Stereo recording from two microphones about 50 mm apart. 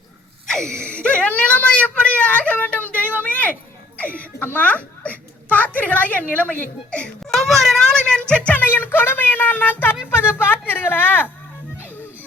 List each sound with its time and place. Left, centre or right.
0.4 s a sound: centre
0.8 s whimper: left
3.9 s a sound: left
4.4 s a woman's voice: left
7.3 s a child's voice: centre
7.9 s speech: centre
8.5 s speech: left